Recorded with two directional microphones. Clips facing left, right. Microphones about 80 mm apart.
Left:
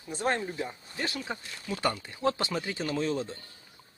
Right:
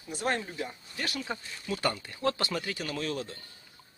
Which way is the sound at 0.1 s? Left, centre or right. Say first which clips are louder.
Left 2 dB; left.